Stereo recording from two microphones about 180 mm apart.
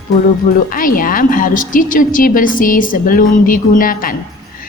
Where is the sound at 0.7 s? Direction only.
50° left (ahead or behind).